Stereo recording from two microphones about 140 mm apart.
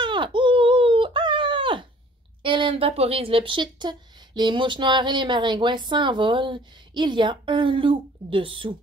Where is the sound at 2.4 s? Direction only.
35° right (ahead or behind).